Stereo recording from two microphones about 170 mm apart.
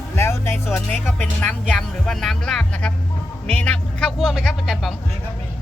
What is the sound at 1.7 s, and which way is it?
Speech, centre (ahead or behind).